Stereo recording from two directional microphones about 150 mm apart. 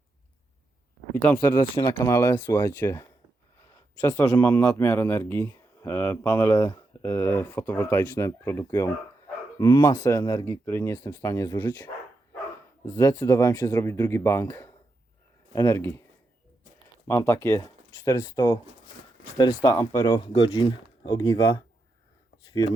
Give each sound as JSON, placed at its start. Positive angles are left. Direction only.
{"t": 1.1, "sound": "a man's voice", "side_deg": 10}
{"t": 1.7, "sound": "speech", "side_deg": 25}
{"t": 4.1, "sound": "a man's voice", "side_deg": 20}
{"t": 12.8, "sound": "speech", "side_deg": 20}
{"t": 17.1, "sound": "speech", "side_deg": 20}